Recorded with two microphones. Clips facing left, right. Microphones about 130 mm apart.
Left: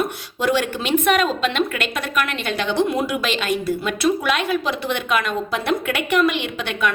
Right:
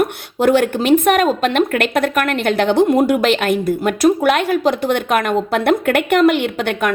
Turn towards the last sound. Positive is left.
turn(degrees=-50)  # may be behind; listen again after turning